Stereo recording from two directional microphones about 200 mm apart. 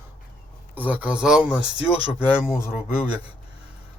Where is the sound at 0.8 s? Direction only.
10° right (ahead or behind).